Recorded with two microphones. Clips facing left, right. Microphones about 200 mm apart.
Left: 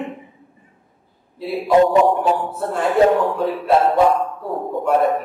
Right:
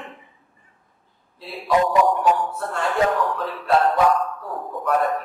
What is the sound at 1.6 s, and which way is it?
Speech, 30° left (ahead or behind).